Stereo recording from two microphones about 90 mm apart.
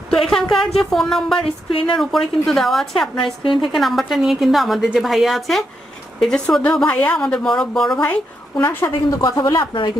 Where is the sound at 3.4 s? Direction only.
70° left (ahead or behind).